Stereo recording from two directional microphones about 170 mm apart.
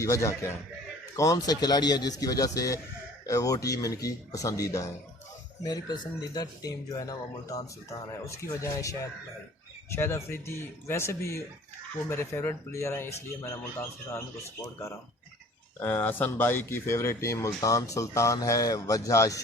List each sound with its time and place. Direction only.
0.0 s speech: 15° left (ahead or behind)
15.8 s speech: 10° left (ahead or behind)